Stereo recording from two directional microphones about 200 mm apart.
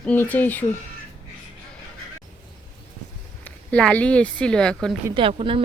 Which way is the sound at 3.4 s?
5° left (ahead or behind).